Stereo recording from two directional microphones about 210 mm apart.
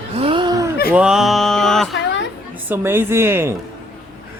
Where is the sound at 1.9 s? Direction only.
60° left (ahead or behind).